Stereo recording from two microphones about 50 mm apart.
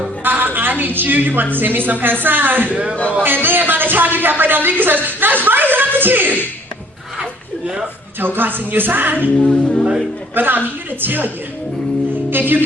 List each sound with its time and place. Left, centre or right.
0.3 s a woman's voice: right
2.9 s speech: left
3.2 s speech: right
8.4 s a woman's voice: right
9.4 s speech: centre
10.3 s a woman's voice: right
12.3 s a woman's voice: right